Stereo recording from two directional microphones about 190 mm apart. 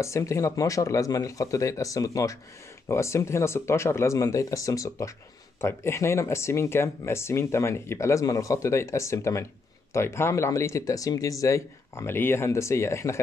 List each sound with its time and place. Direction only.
0.0 s speech: 15° left (ahead or behind)